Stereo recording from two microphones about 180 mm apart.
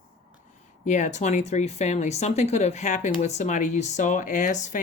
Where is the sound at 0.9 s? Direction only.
40° left (ahead or behind).